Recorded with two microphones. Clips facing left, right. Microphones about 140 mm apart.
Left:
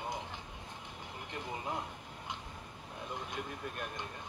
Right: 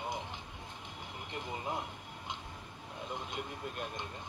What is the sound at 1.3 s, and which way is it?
Speech, 20° right (ahead or behind).